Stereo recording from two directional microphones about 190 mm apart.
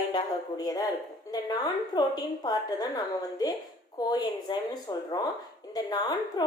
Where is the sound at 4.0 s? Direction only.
20° left (ahead or behind).